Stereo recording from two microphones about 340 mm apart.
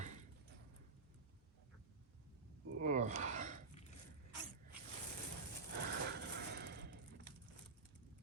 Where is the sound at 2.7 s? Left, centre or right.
Right.